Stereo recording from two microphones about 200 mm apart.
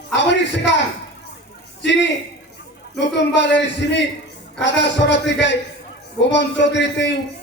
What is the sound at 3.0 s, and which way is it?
A man's voice, 60° left (ahead or behind).